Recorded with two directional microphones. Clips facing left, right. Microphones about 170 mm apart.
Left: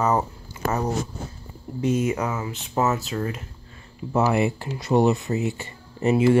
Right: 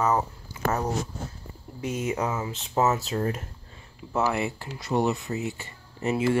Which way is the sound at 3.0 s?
35° right (ahead or behind).